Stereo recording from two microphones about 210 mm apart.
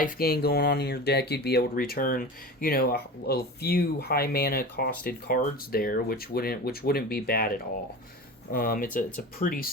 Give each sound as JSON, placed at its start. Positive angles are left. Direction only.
{"t": 0.0, "sound": "speech", "side_deg": 45}
{"t": 8.5, "sound": "speech", "side_deg": 45}